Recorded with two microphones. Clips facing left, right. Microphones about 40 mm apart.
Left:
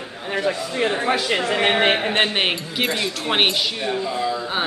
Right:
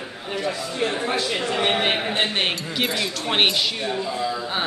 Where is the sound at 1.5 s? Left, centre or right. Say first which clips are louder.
Left 4 dB; left.